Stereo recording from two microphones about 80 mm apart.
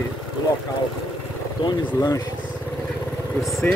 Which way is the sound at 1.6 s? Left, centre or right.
Left.